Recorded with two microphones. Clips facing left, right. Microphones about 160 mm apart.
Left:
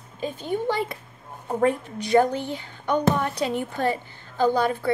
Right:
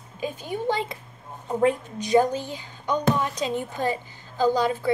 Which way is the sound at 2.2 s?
60° left (ahead or behind).